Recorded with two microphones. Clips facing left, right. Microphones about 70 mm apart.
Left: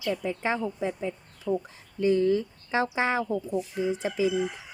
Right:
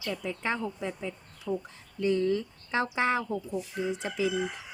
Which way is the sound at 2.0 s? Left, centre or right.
Centre.